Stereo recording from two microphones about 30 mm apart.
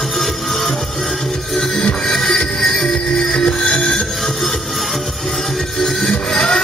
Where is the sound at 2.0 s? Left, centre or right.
Centre.